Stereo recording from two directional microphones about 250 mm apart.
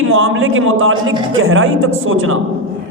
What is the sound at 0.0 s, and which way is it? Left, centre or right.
A man's voice, right.